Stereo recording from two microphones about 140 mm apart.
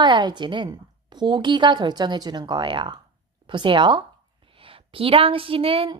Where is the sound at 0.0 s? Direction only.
35° right (ahead or behind).